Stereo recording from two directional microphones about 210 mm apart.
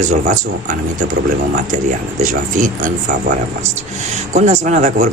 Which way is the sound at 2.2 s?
40° right (ahead or behind).